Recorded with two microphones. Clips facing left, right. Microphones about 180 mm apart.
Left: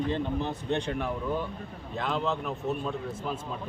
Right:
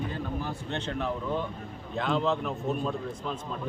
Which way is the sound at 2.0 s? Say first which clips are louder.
Right 3 dB; centre (ahead or behind).